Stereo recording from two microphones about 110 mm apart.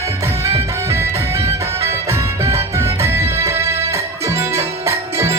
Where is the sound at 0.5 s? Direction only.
25° right (ahead or behind).